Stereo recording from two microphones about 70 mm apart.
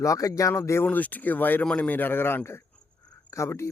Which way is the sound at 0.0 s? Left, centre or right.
Left.